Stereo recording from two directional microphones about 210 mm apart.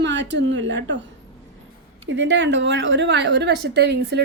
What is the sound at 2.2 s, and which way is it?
A woman's voice, 55° right (ahead or behind).